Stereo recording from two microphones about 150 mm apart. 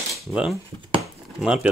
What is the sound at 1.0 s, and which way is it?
Chopping, 5° right (ahead or behind).